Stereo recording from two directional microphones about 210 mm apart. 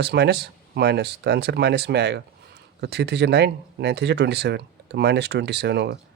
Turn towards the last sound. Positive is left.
turn(degrees=-50)  # may be behind; listen again after turning